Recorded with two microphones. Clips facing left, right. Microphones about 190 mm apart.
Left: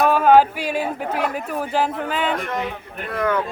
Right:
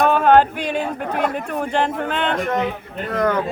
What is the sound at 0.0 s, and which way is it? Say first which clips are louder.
Speech: even; 5° left (ahead or behind).